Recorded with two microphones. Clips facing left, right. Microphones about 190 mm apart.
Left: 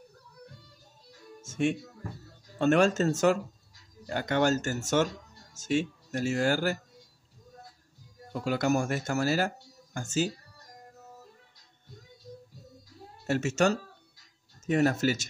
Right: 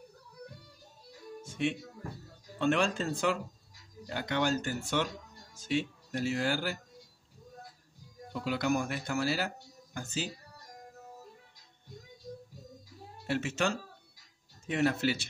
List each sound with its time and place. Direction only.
1.4 s music: 45° left (ahead or behind)
2.6 s speech: 45° left (ahead or behind)
8.3 s speech: 45° left (ahead or behind)
13.3 s speech: 45° left (ahead or behind)